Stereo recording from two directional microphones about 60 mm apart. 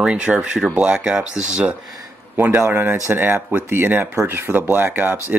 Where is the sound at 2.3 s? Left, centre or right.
Right.